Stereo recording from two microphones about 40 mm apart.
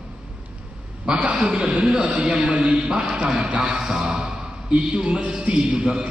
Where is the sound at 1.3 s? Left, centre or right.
Right.